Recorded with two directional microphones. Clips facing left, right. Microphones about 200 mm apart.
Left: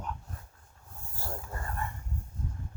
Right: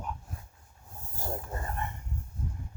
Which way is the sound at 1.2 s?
20° right (ahead or behind).